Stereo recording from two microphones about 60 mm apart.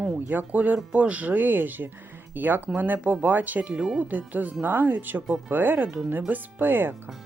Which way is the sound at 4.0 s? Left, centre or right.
Right.